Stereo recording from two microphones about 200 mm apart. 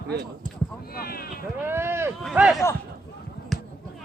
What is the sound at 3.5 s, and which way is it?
Basketball bounce, centre (ahead or behind).